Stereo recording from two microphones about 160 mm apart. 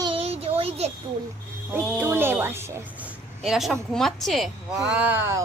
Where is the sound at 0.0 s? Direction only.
35° right (ahead or behind).